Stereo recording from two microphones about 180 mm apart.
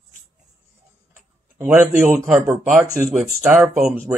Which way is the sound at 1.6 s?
10° right (ahead or behind).